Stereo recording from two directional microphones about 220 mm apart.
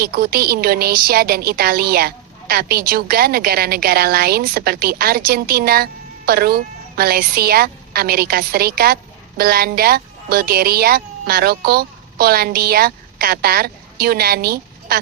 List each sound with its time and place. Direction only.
0.0 s speech: 40° right (ahead or behind)